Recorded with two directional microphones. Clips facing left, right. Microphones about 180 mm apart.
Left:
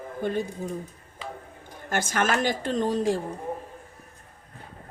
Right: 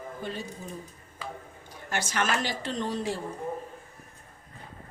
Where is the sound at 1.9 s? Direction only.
50° left (ahead or behind).